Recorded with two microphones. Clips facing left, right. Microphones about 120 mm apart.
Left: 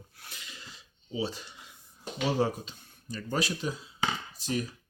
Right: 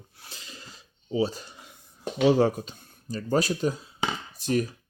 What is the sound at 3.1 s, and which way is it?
Speech, 40° right (ahead or behind).